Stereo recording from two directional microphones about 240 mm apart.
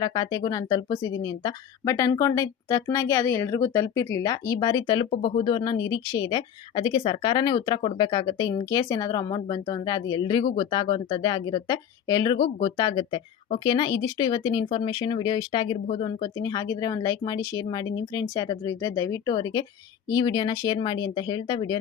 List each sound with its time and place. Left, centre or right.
0.0 s speech: centre